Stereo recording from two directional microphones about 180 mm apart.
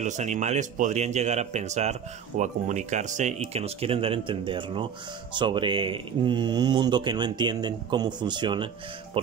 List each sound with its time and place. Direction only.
0.0 s speech: 40° right (ahead or behind)